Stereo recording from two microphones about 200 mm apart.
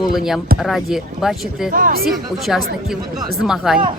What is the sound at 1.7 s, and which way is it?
Speech, 45° right (ahead or behind).